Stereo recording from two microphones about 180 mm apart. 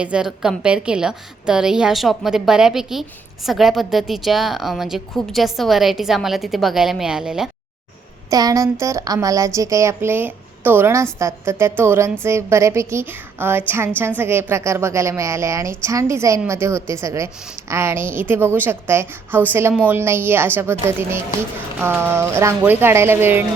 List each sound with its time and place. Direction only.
0.0 s a woman's voice: 5° right (ahead or behind)
8.3 s speech: 20° right (ahead or behind)
21.8 s speech: 15° right (ahead or behind)